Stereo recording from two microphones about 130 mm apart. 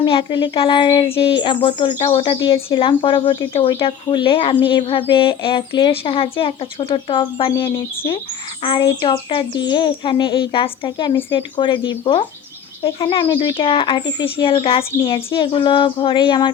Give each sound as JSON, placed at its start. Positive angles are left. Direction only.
{"t": 0.0, "sound": "speech", "side_deg": 40}
{"t": 8.6, "sound": "speech", "side_deg": 35}